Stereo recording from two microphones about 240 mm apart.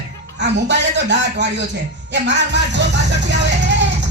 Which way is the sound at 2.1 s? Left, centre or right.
Right.